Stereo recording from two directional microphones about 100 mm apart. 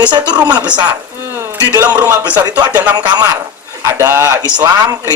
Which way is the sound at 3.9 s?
25° right (ahead or behind).